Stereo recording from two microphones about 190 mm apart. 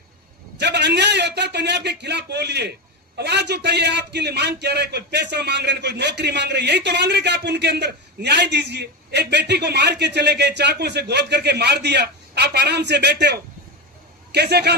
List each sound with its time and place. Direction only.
0.6 s a man's voice: 65° right (ahead or behind)